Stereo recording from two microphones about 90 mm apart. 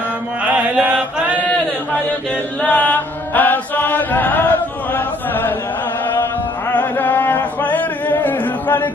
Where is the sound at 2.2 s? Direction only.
15° left (ahead or behind).